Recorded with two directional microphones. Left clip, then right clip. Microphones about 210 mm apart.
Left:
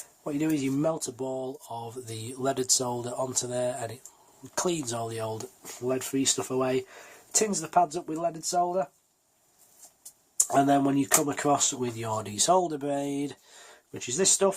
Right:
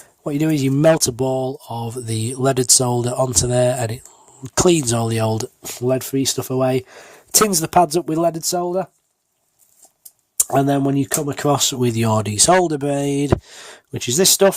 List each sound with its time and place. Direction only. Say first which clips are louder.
0.3 s speech: right 9 dB; 45° right (ahead or behind)
10.3 s speech: right 5 dB; 45° right (ahead or behind)